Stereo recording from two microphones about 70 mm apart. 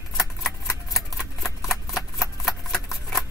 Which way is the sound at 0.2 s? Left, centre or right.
Centre.